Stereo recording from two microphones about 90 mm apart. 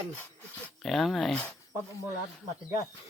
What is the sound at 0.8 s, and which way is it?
Speech, centre (ahead or behind).